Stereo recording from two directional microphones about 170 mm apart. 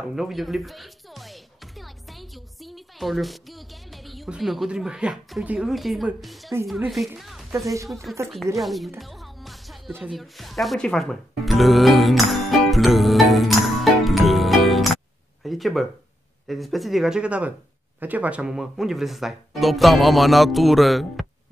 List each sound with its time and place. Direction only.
0.1 s music: centre (ahead or behind)
7.6 s speech: 20° right (ahead or behind)
7.9 s speech: centre (ahead or behind)
8.5 s music: centre (ahead or behind)
9.9 s speech: centre (ahead or behind)
14.0 s music: centre (ahead or behind)
15.4 s a sound: centre (ahead or behind)
16.4 s speech: centre (ahead or behind)